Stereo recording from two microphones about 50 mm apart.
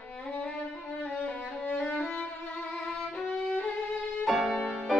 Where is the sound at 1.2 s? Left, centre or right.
Left.